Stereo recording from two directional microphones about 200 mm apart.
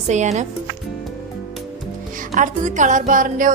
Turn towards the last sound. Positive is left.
turn(degrees=-40)  # may be behind; listen again after turning